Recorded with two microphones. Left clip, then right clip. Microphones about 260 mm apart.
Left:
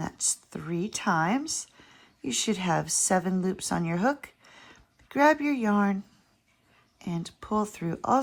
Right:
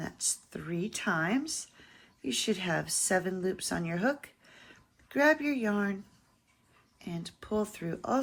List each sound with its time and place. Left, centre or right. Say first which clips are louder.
0.0 s speech: left 4 dB; left
7.0 s speech: left 5 dB; left